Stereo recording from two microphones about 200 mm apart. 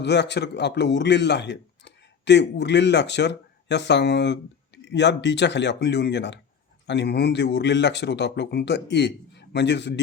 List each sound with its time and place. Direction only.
0.0 s a man's voice: 60° left (ahead or behind)